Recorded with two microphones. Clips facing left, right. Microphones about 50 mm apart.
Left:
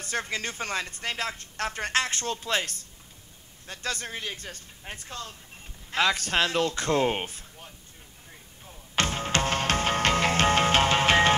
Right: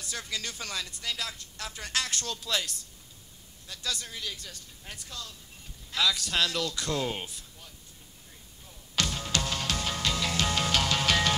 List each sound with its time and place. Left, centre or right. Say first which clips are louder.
0.0 s speech: left 6 dB; left
8.6 s music: left 4 dB; left